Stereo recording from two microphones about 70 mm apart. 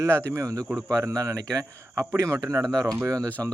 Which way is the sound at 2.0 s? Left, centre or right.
Right.